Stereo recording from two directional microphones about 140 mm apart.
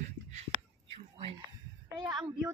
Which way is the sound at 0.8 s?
40° right (ahead or behind).